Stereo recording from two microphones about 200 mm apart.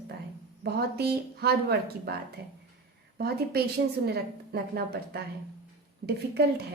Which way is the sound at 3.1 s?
50° right (ahead or behind).